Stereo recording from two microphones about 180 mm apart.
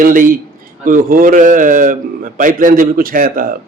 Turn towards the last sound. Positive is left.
turn(degrees=-55)  # may be behind; listen again after turning